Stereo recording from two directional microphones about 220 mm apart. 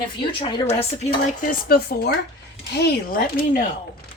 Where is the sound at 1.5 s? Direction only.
45° left (ahead or behind).